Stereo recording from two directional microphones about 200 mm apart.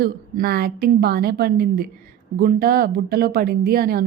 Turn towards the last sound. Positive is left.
turn(degrees=-50)  # may be behind; listen again after turning